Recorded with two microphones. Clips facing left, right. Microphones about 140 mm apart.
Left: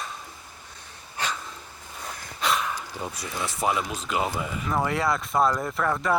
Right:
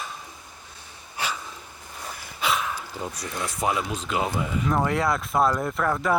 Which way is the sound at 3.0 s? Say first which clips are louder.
Right 1 dB; 5° left (ahead or behind).